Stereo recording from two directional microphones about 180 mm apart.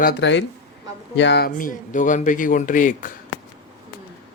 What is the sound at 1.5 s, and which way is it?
Speech, 50° left (ahead or behind).